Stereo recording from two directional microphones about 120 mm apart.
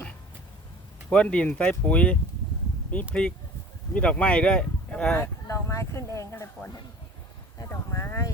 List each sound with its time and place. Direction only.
1.1 s speech: 10° left (ahead or behind)
5.1 s speech: 20° left (ahead or behind)